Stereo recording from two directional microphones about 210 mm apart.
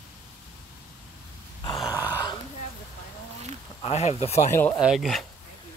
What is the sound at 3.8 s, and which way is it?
Speech, 30° left (ahead or behind).